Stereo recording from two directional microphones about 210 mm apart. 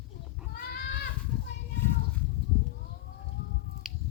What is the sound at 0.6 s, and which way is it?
Goat, 50° left (ahead or behind).